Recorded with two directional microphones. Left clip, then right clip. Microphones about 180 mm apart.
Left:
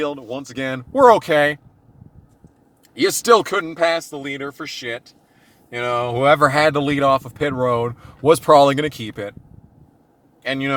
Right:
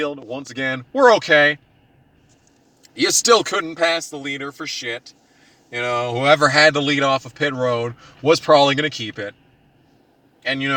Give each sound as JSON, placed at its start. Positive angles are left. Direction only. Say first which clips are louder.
{"t": 0.0, "sound": "speech", "louder": "left 1 dB", "side_deg": 25}
{"t": 3.0, "sound": "speech", "louder": "left 1 dB", "side_deg": 25}
{"t": 10.4, "sound": "speech", "louder": "right 1 dB", "side_deg": 35}